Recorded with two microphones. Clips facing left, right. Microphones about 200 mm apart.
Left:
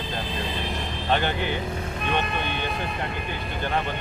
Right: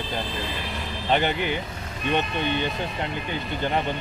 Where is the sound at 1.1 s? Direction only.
15° right (ahead or behind).